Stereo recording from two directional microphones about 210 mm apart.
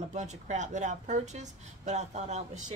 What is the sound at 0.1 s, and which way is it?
A woman's voice, 35° right (ahead or behind).